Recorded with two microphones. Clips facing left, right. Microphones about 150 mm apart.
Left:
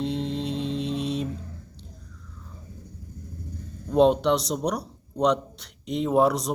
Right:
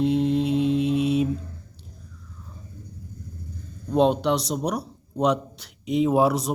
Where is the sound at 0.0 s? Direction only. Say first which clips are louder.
Right 7 dB; 5° right (ahead or behind).